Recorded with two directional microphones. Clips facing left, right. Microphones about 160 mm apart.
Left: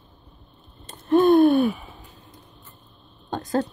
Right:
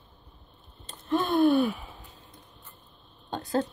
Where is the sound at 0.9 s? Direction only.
50° left (ahead or behind).